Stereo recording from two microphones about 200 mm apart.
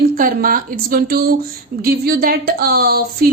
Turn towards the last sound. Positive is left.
turn(degrees=-50)  # may be behind; listen again after turning